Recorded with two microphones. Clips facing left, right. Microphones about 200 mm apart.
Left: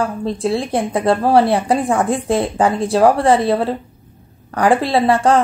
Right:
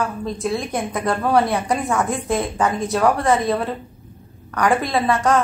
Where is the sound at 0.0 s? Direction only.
30° left (ahead or behind).